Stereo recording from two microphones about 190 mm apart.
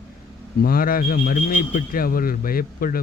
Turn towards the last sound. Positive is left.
turn(degrees=50)  # may be behind; listen again after turning